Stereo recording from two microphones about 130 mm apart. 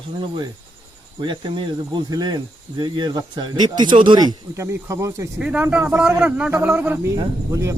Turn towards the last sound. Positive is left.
turn(degrees=-25)  # may be behind; listen again after turning